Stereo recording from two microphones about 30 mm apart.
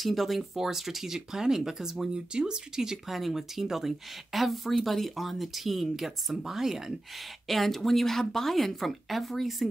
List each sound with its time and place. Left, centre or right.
0.0 s speech: centre
2.3 s speech: right
3.1 s speech: centre
7.4 s speech: centre